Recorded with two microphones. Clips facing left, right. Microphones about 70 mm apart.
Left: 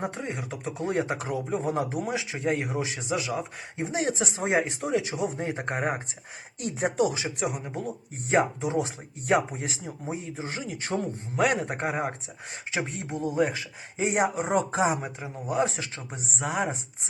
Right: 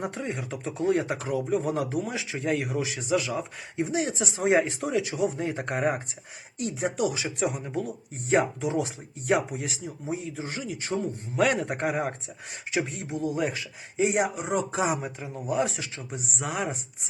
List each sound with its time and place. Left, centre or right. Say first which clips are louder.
0.0 s speech: even; left
3.2 s speech: right 2 dB; centre
3.8 s speech: even; left
4.6 s speech: even; left
6.6 s speech: even; left
6.9 s speech: left 2 dB; left
7.3 s speech: right 2 dB; centre
8.3 s speech: even; left
11.3 s speech: right 1 dB; left
12.7 s speech: right 2 dB; left
15.0 s speech: right 1 dB; left